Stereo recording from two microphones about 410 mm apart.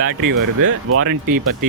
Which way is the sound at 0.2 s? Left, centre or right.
Right.